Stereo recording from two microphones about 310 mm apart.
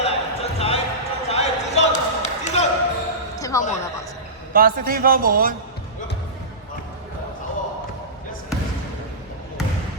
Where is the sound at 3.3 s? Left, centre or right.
Centre.